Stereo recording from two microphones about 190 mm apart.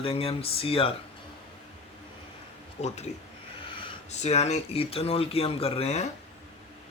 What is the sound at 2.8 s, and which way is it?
Speech, 35° left (ahead or behind).